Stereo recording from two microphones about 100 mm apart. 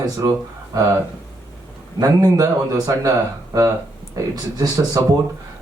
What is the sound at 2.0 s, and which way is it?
Speech, 40° right (ahead or behind).